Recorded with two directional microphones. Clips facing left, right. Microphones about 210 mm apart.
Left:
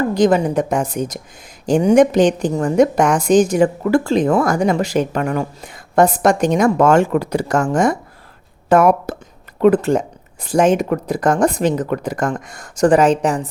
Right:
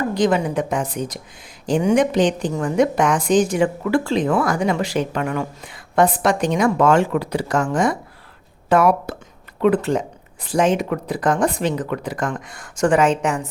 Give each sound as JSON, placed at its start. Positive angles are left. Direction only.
{"t": 0.1, "sound": "a woman's voice", "side_deg": 40}